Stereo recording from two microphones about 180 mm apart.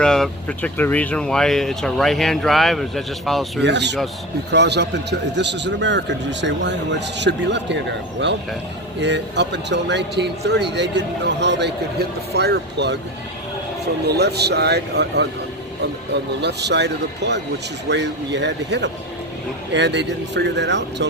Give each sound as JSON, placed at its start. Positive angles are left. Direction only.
{"t": 0.0, "sound": "speech", "side_deg": 5}
{"t": 3.6, "sound": "speech", "side_deg": -75}
{"t": 14.1, "sound": "speech", "side_deg": -65}
{"t": 16.4, "sound": "speech", "side_deg": -70}